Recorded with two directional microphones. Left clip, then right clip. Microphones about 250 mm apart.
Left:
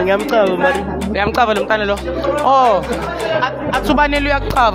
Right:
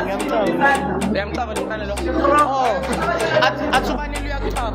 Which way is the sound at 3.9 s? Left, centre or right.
Left.